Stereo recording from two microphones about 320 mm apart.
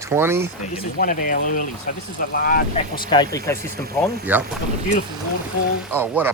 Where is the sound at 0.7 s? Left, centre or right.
Left.